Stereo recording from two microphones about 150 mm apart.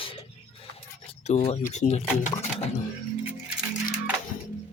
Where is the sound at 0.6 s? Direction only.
40° left (ahead or behind).